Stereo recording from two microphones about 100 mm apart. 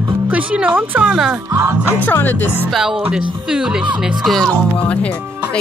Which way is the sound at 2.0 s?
20° left (ahead or behind).